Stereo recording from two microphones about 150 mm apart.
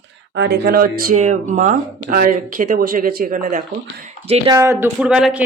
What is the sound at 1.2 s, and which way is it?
Speech, 55° right (ahead or behind).